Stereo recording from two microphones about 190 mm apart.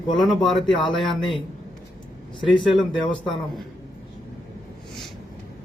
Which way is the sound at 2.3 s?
25° left (ahead or behind).